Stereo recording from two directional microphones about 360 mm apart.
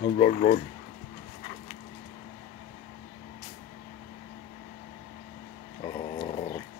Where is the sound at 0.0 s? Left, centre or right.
Centre.